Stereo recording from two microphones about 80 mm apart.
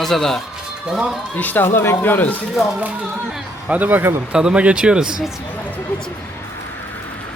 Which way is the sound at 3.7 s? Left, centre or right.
Right.